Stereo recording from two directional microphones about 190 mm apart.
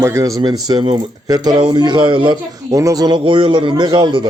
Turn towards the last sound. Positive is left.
turn(degrees=-25)  # may be behind; listen again after turning